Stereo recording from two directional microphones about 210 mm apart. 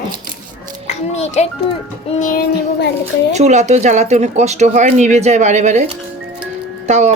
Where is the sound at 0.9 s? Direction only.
35° left (ahead or behind).